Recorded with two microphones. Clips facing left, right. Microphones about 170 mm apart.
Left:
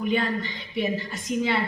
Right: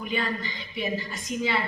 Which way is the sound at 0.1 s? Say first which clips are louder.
Left 1 dB; 60° left (ahead or behind).